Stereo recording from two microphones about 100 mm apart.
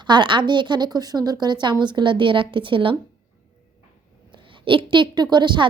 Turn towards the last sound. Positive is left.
turn(degrees=-50)  # may be behind; listen again after turning